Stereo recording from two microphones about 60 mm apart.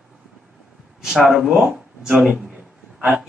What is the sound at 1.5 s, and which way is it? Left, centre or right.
Speech, centre.